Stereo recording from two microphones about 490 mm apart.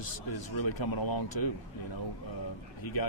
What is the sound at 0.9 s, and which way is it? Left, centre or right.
Speech, left.